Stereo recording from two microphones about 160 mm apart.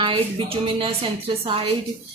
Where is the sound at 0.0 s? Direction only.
30° right (ahead or behind).